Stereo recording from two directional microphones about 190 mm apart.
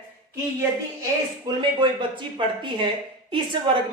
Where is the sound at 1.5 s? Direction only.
25° right (ahead or behind).